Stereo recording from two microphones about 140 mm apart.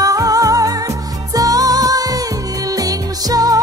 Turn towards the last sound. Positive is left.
turn(degrees=-25)  # may be behind; listen again after turning